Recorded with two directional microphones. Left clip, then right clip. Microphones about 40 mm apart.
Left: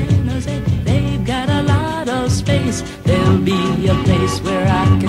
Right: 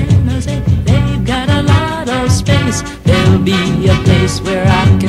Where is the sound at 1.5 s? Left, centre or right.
Left.